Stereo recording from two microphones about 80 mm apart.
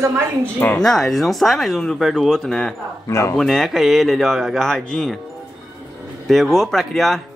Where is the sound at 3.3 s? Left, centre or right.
Centre.